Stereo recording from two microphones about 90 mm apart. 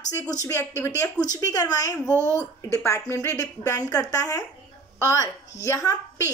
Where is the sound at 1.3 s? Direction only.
45° left (ahead or behind).